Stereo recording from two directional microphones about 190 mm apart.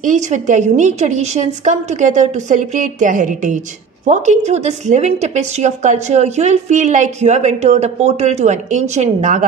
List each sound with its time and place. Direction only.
0.0 s a woman's voice: 40° right (ahead or behind)